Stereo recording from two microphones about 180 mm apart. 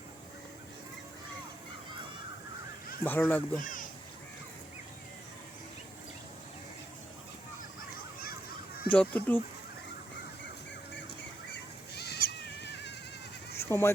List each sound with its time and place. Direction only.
3.0 s speech: 10° left (ahead or behind)
3.6 s a sound: 50° left (ahead or behind)
8.9 s speech: 10° left (ahead or behind)
11.9 s cat: 65° left (ahead or behind)
13.6 s speech: 15° left (ahead or behind)